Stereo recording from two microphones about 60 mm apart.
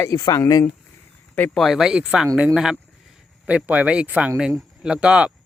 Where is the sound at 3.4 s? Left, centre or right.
Right.